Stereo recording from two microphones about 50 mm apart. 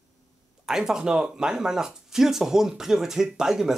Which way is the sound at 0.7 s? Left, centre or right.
Centre.